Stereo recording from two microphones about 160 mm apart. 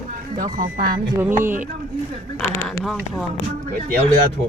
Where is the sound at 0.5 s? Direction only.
60° right (ahead or behind).